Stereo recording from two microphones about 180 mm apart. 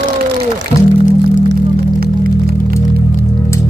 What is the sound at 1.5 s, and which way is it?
Music, 55° right (ahead or behind).